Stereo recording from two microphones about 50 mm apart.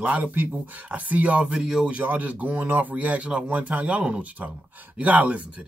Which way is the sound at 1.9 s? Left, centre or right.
Right.